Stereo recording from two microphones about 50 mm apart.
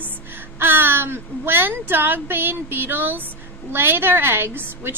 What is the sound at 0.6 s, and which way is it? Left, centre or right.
A woman's voice, right.